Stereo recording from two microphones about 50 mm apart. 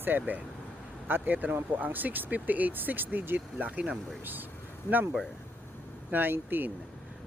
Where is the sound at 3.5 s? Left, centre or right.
Right.